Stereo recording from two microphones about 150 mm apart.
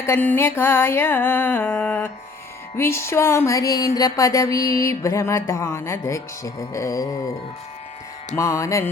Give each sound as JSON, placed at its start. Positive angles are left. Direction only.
{"t": 0.0, "sound": "music", "side_deg": 15}
{"t": 8.4, "sound": "music", "side_deg": 20}